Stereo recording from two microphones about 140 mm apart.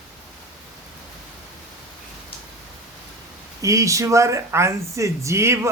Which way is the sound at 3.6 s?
25° right (ahead or behind).